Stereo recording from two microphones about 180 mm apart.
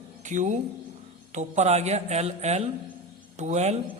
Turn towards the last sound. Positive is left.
turn(degrees=-40)  # may be behind; listen again after turning